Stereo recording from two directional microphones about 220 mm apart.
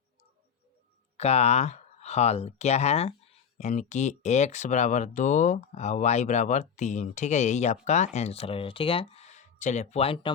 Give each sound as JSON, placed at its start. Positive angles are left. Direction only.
{"t": 1.1, "sound": "speech", "side_deg": 30}